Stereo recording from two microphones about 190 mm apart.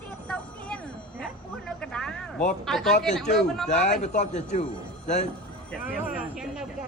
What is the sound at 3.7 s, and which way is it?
Speech, 40° left (ahead or behind).